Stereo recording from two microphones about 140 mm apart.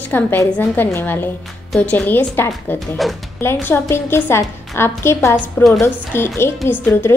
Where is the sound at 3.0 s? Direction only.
Centre (ahead or behind).